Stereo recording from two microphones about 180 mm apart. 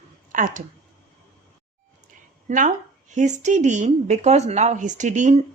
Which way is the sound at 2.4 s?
45° right (ahead or behind).